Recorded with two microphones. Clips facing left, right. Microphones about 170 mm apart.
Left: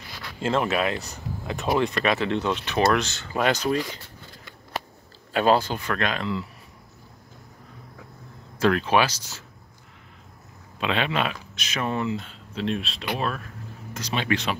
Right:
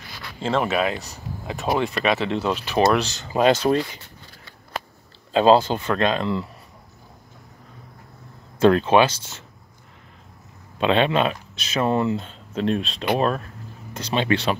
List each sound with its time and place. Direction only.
0.4 s speech: centre (ahead or behind)
2.9 s speech: 35° right (ahead or behind)
3.2 s speech: 20° right (ahead or behind)
5.3 s speech: 20° right (ahead or behind)
8.5 s speech: 25° right (ahead or behind)
10.8 s speech: 35° right (ahead or behind)
13.9 s speech: 30° right (ahead or behind)